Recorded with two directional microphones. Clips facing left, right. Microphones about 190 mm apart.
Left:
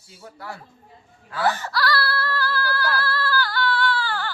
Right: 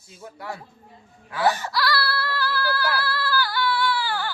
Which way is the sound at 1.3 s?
15° right (ahead or behind).